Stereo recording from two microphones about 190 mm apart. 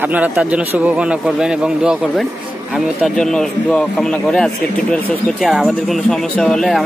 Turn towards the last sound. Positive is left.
turn(degrees=0)  # may be behind; listen again after turning